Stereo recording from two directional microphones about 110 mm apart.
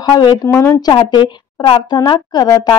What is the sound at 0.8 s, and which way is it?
Speech, 40° left (ahead or behind).